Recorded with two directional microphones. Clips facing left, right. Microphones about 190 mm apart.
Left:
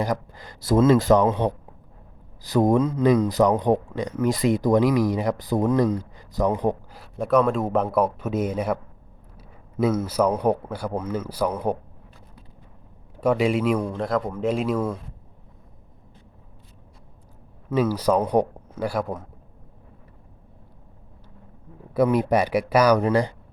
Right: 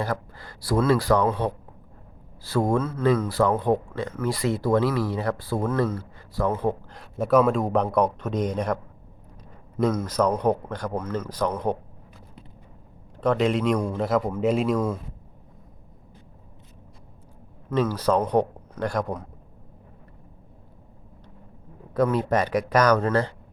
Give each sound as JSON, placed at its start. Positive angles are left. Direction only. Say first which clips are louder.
{"t": 0.0, "sound": "speech", "louder": "left 3 dB", "side_deg": 15}
{"t": 6.9, "sound": "speech", "louder": "right 2 dB", "side_deg": 0}
{"t": 13.1, "sound": "speech", "louder": "left 1 dB", "side_deg": 10}
{"t": 17.7, "sound": "speech", "louder": "left 2 dB", "side_deg": 10}
{"t": 21.9, "sound": "speech", "louder": "left 2 dB", "side_deg": 10}